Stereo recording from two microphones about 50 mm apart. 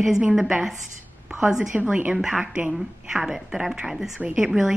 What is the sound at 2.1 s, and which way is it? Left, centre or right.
Speech, centre.